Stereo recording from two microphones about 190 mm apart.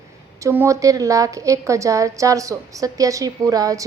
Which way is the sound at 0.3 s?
15° right (ahead or behind).